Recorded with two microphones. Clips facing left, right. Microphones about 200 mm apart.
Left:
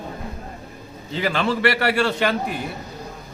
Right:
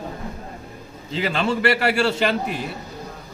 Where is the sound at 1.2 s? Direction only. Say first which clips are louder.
Even; 30° right (ahead or behind).